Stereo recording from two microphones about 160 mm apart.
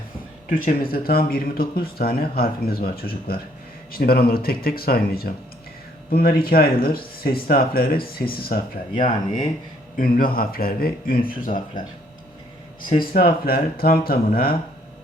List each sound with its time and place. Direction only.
0.5 s speech: 60° left (ahead or behind)
10.0 s speech: 65° left (ahead or behind)
13.1 s speech: 70° left (ahead or behind)